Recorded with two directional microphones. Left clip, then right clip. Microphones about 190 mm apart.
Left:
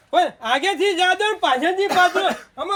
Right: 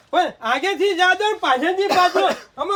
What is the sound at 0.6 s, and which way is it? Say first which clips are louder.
Speech: even; 30° left (ahead or behind).